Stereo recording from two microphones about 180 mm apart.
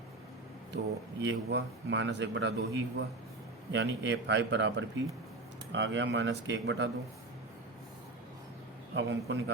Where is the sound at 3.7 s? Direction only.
85° right.